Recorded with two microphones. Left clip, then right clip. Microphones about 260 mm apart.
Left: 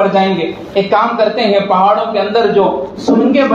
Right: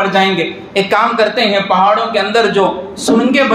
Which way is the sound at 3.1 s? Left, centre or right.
Right.